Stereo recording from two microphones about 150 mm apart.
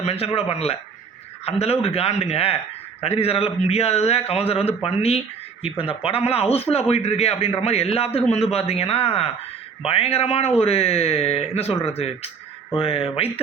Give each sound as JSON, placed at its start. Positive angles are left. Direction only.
{"t": 0.0, "sound": "speech", "side_deg": 45}